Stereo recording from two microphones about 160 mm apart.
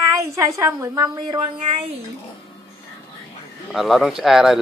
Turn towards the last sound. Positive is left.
turn(degrees=0)  # may be behind; listen again after turning